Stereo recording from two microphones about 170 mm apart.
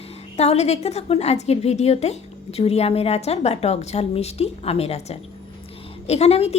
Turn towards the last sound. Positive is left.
turn(degrees=40)  # may be behind; listen again after turning